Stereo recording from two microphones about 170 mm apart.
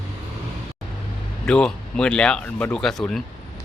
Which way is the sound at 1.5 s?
5° left (ahead or behind).